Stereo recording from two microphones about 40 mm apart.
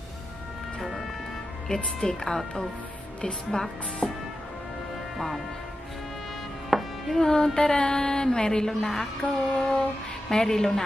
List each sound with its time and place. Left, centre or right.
0.7 s music: centre
1.7 s speech: centre
3.5 s a sound: centre
4.0 s music: centre
5.1 s speech: centre
6.7 s music: centre
7.2 s a sound: centre
10.3 s speech: centre